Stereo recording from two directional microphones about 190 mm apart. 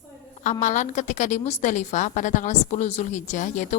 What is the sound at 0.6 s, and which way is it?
A woman's voice, 40° left (ahead or behind).